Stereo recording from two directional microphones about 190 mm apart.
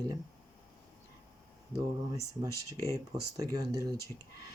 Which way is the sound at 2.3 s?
20° right (ahead or behind).